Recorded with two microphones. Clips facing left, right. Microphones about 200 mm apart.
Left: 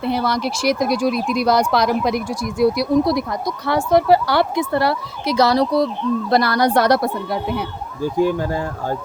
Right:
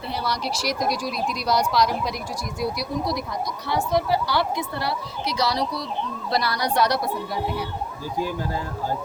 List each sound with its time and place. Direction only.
0.0 s speech: 55° left (ahead or behind)